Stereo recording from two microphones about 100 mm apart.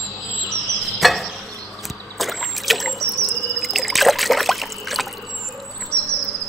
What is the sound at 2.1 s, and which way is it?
Boat, centre (ahead or behind).